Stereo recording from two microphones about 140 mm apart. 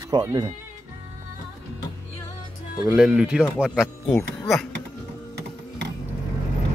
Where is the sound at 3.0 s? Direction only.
5° right (ahead or behind).